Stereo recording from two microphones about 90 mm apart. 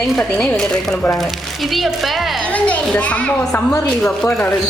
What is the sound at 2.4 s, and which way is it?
A woman's voice, 15° left (ahead or behind).